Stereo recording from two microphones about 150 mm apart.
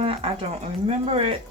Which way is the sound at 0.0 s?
40° right (ahead or behind).